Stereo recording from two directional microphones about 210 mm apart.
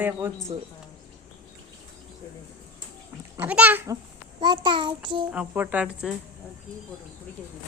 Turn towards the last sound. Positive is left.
turn(degrees=-5)  # may be behind; listen again after turning